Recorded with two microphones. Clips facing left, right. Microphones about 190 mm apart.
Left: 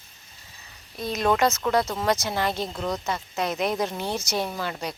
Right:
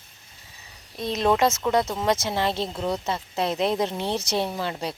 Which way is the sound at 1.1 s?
25° right (ahead or behind).